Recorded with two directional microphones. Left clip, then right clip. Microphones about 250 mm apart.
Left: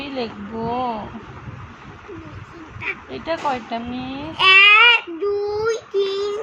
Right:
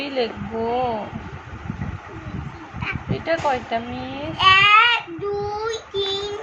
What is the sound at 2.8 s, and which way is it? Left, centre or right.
Speech, centre.